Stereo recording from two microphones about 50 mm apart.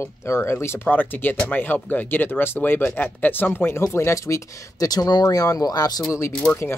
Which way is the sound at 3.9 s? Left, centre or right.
Left.